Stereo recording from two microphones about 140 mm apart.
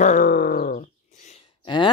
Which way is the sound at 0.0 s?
75° left (ahead or behind).